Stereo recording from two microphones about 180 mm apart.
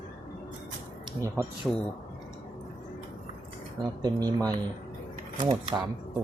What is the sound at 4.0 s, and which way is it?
Speech, 20° right (ahead or behind).